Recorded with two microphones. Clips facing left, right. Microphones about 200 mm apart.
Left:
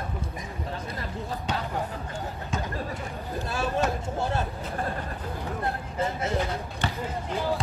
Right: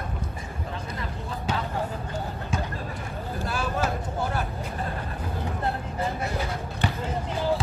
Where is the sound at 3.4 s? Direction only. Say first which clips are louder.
Even; 25° left (ahead or behind).